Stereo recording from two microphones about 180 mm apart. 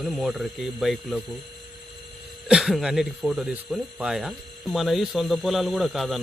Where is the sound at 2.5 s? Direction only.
Centre (ahead or behind).